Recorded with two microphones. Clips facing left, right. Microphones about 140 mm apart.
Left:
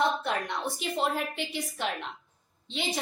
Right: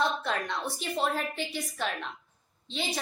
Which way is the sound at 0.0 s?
20° left (ahead or behind).